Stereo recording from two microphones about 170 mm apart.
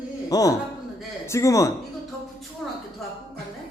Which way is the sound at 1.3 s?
15° left (ahead or behind).